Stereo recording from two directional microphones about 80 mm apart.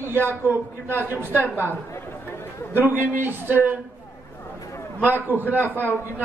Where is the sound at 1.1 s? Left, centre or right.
Left.